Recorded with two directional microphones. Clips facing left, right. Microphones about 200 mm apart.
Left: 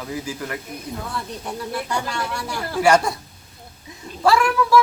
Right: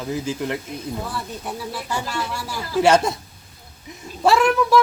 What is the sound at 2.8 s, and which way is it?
Speech, 20° right (ahead or behind).